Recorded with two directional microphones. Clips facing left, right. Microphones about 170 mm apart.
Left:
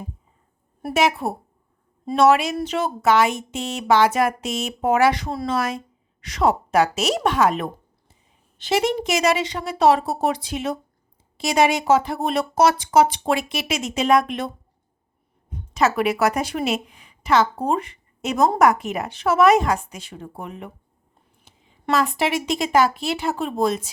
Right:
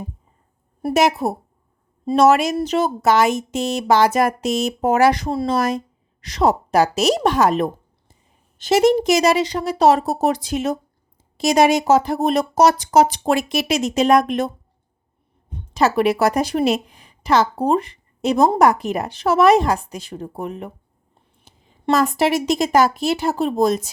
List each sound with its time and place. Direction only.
0.9 s speech: 40° right (ahead or behind)